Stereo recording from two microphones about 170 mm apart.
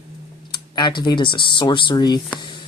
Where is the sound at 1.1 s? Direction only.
30° left (ahead or behind).